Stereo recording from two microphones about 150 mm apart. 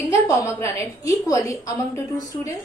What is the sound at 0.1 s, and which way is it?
A woman's voice, 20° left (ahead or behind).